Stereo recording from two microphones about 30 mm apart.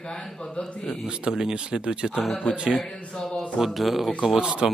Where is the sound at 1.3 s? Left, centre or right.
Right.